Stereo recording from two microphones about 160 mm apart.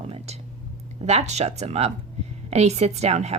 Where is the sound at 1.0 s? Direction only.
45° right (ahead or behind).